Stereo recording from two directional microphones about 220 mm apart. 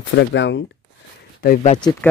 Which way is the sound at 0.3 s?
55° left (ahead or behind).